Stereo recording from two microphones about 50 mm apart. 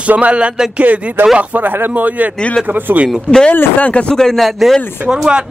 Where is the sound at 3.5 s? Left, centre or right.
Left.